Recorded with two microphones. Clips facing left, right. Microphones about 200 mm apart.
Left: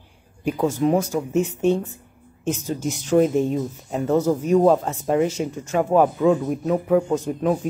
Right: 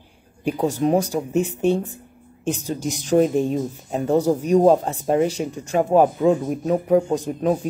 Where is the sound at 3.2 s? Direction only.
15° right (ahead or behind).